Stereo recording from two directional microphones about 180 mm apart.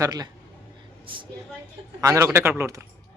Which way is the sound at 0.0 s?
20° right (ahead or behind).